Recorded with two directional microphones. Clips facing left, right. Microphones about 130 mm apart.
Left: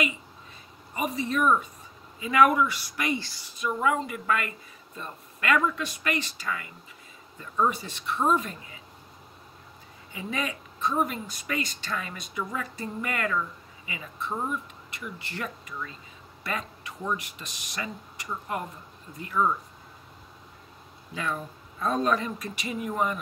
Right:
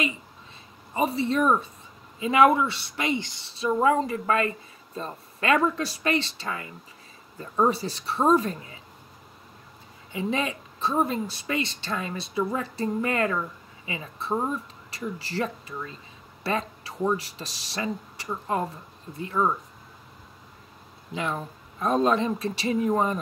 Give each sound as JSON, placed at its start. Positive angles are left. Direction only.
{"t": 0.9, "sound": "a woman's voice", "side_deg": -30}
{"t": 10.1, "sound": "a woman's voice", "side_deg": -30}
{"t": 21.1, "sound": "a woman's voice", "side_deg": -25}